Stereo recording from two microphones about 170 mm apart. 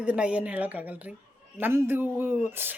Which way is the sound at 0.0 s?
5° right (ahead or behind).